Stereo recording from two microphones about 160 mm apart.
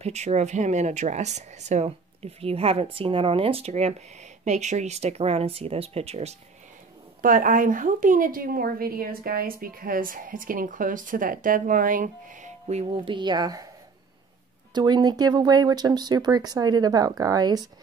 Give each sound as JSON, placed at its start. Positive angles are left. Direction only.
{"t": 0.0, "sound": "speech", "side_deg": -45}
{"t": 7.2, "sound": "a woman's voice", "side_deg": -60}
{"t": 14.7, "sound": "speech", "side_deg": -25}